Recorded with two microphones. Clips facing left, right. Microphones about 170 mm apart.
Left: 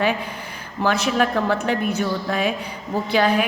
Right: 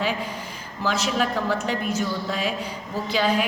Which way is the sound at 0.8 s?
60° left (ahead or behind).